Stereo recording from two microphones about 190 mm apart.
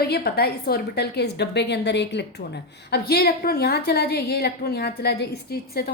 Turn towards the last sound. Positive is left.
turn(degrees=55)  # may be behind; listen again after turning